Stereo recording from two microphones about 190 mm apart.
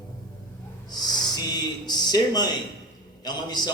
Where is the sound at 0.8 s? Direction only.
20° left (ahead or behind).